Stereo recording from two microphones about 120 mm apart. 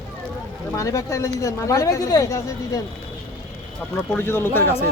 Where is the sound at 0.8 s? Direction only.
25° left (ahead or behind).